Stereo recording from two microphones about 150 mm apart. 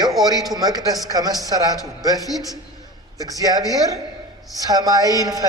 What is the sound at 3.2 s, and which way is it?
Speech, 25° right (ahead or behind).